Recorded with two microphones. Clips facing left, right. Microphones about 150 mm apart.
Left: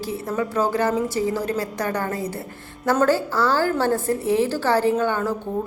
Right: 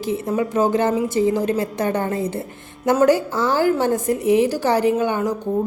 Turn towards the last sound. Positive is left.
turn(degrees=-15)  # may be behind; listen again after turning